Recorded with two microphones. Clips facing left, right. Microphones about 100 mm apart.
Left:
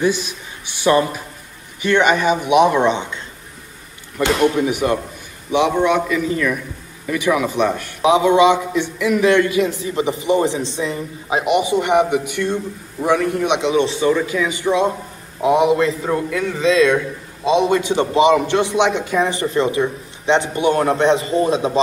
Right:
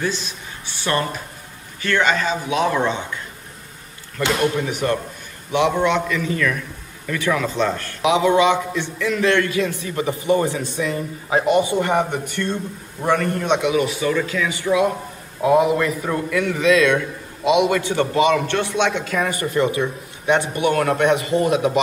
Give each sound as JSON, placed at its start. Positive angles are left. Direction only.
{"t": 0.0, "sound": "a man's voice", "side_deg": 15}
{"t": 4.2, "sound": "a man's voice", "side_deg": 15}
{"t": 6.2, "sound": "a man's voice", "side_deg": 20}
{"t": 13.6, "sound": "a man's voice", "side_deg": 25}